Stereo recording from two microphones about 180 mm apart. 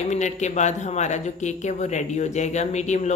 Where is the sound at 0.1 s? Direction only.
40° left (ahead or behind).